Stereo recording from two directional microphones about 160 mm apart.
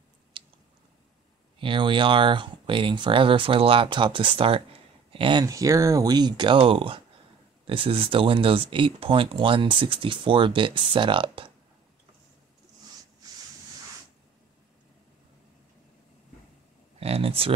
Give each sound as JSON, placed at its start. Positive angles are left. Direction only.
{"t": 0.3, "sound": "a sound", "side_deg": -30}
{"t": 1.6, "sound": "speech", "side_deg": -30}
{"t": 17.0, "sound": "speech", "side_deg": -35}